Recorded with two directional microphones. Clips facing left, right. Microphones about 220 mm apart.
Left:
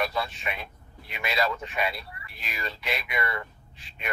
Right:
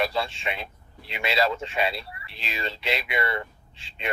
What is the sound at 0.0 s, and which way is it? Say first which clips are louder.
Speech: right 3 dB; 25° right (ahead or behind).